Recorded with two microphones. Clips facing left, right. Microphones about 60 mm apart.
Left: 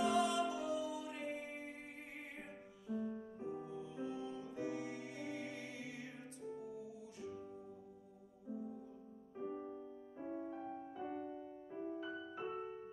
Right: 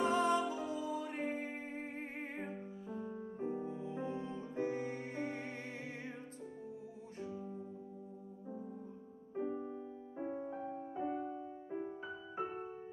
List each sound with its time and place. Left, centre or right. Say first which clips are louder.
0.0 s music: right 3 dB; right
9.5 s music: right 4 dB; right
10.1 s music: right 4 dB; right